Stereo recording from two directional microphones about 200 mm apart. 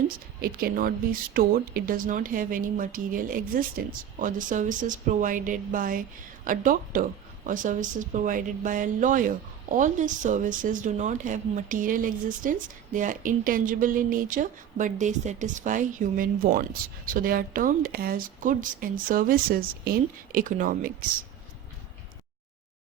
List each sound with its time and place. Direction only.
0.4 s speech: 50° right (ahead or behind)